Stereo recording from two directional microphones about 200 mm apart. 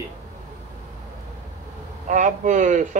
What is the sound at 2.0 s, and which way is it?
Speech, 40° right (ahead or behind).